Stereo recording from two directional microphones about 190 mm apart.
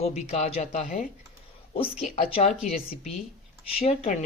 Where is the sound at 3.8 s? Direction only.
35° left (ahead or behind).